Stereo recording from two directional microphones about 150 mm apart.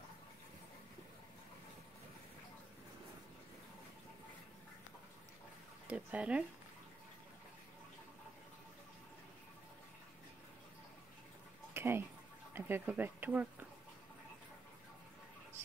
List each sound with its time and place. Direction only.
5.9 s speech: 10° right (ahead or behind)
11.7 s a sound: 15° right (ahead or behind)
12.5 s speech: 15° right (ahead or behind)